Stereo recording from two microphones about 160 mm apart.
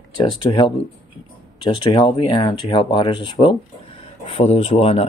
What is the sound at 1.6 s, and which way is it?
Speech, 35° left (ahead or behind).